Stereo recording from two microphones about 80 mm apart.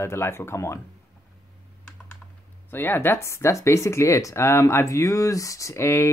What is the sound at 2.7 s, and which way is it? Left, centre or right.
Speech, left.